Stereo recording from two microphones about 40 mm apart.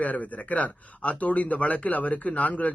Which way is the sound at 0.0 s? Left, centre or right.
Left.